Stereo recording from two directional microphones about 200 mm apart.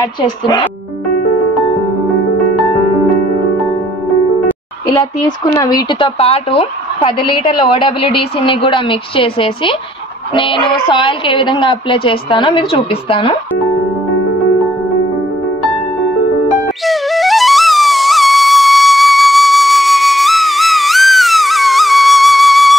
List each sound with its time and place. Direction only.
5.6 s a woman's voice: 20° left (ahead or behind)
16.6 s music: centre (ahead or behind)